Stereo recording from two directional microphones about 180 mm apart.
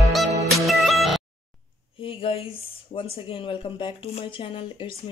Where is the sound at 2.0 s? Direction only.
30° left (ahead or behind).